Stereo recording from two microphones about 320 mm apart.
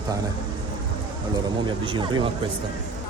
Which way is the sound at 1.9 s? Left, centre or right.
Centre.